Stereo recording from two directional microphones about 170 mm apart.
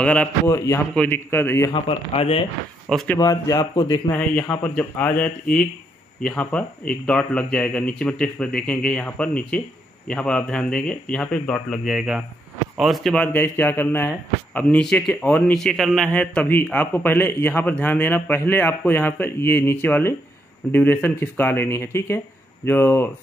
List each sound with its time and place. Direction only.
0.0 s speech: 10° left (ahead or behind)
1.7 s a man's voice: 35° left (ahead or behind)
2.9 s speech: centre (ahead or behind)
3.2 s a man's voice: 20° left (ahead or behind)
4.1 s speech: 10° left (ahead or behind)